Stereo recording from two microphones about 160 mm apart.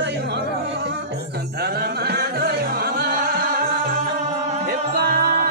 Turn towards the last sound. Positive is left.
turn(degrees=-70)  # may be behind; listen again after turning